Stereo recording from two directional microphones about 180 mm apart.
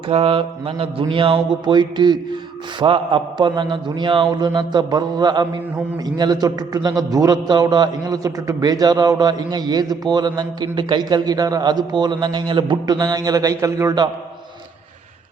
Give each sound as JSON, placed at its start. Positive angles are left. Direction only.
{"t": 0.1, "sound": "a man's voice", "side_deg": -30}